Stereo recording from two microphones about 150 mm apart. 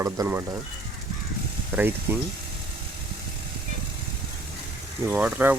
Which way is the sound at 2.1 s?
10° right (ahead or behind).